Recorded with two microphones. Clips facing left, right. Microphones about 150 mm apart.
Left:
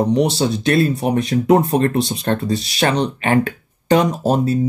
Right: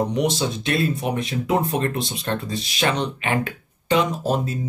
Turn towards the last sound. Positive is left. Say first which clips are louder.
# left 6 dB
turn(degrees=40)  # may be behind; listen again after turning